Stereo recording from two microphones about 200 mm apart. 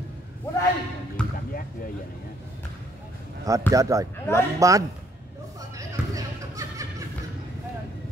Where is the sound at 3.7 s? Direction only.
15° right (ahead or behind).